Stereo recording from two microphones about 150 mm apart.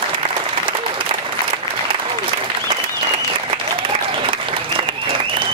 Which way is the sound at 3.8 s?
35° right (ahead or behind).